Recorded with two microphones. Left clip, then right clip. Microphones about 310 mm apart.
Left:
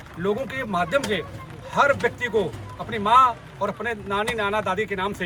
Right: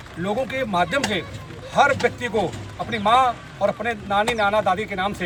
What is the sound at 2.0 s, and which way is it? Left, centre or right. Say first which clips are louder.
Speech: right 1 dB; centre.